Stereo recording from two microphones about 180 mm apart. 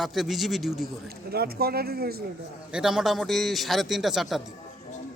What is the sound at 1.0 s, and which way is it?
Speech, 60° right (ahead or behind).